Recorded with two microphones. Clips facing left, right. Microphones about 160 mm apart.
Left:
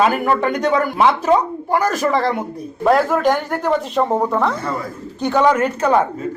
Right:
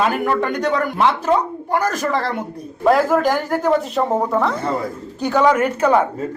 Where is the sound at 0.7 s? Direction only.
10° left (ahead or behind).